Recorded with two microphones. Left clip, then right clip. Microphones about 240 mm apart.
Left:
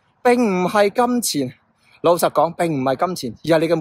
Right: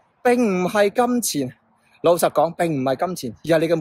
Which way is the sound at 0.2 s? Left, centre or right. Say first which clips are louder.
Left 2 dB; centre.